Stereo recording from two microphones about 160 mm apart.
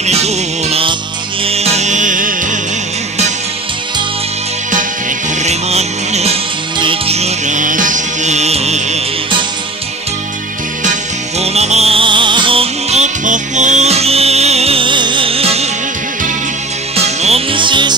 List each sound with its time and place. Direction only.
0.0 s music: 40° right (ahead or behind)
5.4 s music: 45° right (ahead or behind)
11.3 s music: 40° right (ahead or behind)
16.9 s music: 40° right (ahead or behind)